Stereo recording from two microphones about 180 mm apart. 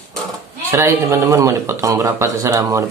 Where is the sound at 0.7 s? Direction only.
15° right (ahead or behind).